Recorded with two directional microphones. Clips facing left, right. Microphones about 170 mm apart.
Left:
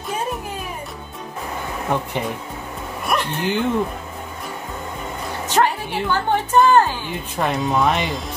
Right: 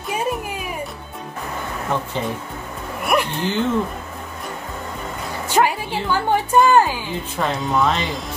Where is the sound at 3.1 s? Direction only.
10° right (ahead or behind).